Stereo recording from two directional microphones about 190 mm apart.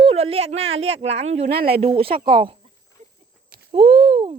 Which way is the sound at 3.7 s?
30° right (ahead or behind).